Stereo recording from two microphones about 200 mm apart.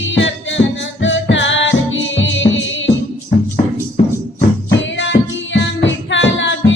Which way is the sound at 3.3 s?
55° left (ahead or behind).